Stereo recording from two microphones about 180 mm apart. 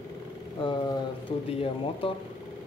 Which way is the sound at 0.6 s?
25° left (ahead or behind).